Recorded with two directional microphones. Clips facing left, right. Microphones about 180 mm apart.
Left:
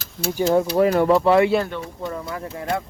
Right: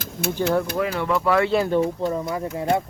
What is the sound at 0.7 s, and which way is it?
Speech, 35° left (ahead or behind).